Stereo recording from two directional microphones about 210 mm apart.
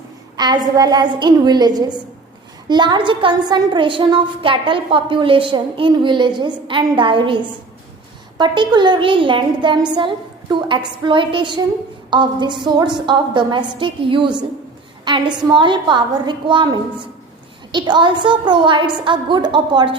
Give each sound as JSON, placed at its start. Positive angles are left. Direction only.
{"t": 0.3, "sound": "a woman's voice", "side_deg": -20}
{"t": 8.4, "sound": "a woman's voice", "side_deg": -20}
{"t": 15.5, "sound": "a woman's voice", "side_deg": -20}